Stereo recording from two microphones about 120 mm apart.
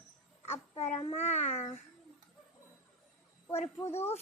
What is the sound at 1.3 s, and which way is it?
Speech, 65° left (ahead or behind).